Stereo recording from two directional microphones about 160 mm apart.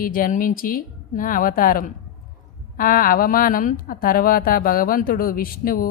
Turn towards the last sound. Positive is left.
turn(degrees=65)  # may be behind; listen again after turning